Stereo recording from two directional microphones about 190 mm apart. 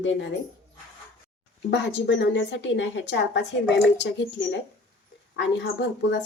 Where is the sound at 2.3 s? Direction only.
70° left (ahead or behind).